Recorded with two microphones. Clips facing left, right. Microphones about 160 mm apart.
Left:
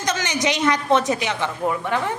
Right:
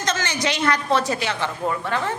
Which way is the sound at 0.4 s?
20° left (ahead or behind).